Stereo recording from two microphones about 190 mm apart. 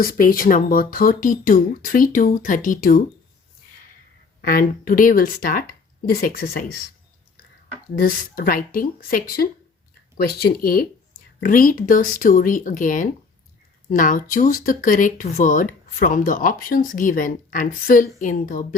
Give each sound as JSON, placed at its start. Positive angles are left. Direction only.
{"t": 0.0, "sound": "speech", "side_deg": 50}
{"t": 4.4, "sound": "speech", "side_deg": 50}
{"t": 7.9, "sound": "speech", "side_deg": 50}